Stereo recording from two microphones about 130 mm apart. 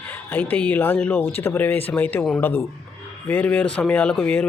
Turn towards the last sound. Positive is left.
turn(degrees=10)  # may be behind; listen again after turning